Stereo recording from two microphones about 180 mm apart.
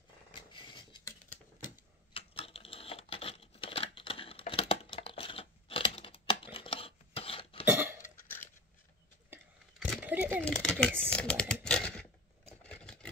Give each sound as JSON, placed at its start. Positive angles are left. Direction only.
{"t": 0.5, "sound": "scissors", "side_deg": 25}
{"t": 2.1, "sound": "a sound", "side_deg": 30}
{"t": 7.6, "sound": "cough", "side_deg": -10}
{"t": 8.0, "sound": "a sound", "side_deg": 15}
{"t": 9.3, "sound": "vehicle", "side_deg": -10}
{"t": 10.0, "sound": "a sound", "side_deg": -10}
{"t": 10.4, "sound": "speech", "side_deg": 5}
{"t": 11.1, "sound": "typing", "side_deg": 5}
{"t": 11.6, "sound": "scissors", "side_deg": 5}